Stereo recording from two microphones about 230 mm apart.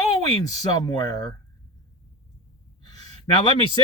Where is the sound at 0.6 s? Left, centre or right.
Centre.